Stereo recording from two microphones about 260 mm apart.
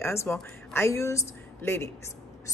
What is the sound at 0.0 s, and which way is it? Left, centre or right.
Speech, centre.